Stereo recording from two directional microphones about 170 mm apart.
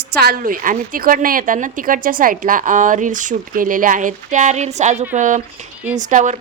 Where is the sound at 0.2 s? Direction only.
60° right (ahead or behind).